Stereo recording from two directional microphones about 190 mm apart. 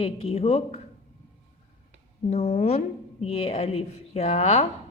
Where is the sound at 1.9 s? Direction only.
35° left (ahead or behind).